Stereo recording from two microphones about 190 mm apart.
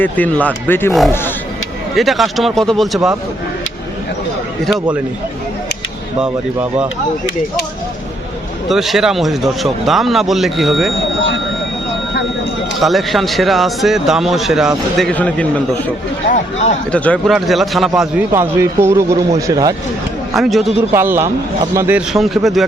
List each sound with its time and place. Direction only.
0.0 s speech: 10° left (ahead or behind)
2.0 s a man's voice: centre (ahead or behind)
6.1 s speech: 5° right (ahead or behind)
8.7 s a man's voice: centre (ahead or behind)
12.8 s a man's voice: centre (ahead or behind)
16.3 s a man's voice: 35° left (ahead or behind)
16.9 s a man's voice: 5° left (ahead or behind); by 19.7 s 20° right (ahead or behind)
20.3 s a man's voice: centre (ahead or behind)
20.9 s a man's voice: 10° right (ahead or behind)